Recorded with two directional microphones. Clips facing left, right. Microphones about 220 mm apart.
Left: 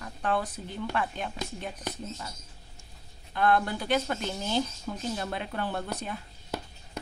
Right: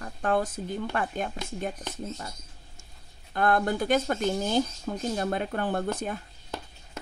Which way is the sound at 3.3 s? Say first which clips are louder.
Right 1 dB; 45° right (ahead or behind).